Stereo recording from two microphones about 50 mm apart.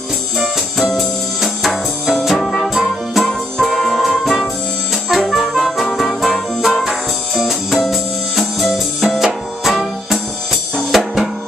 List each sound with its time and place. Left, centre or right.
0.4 s music: centre
3.3 s music: centre
10.8 s drum kit: centre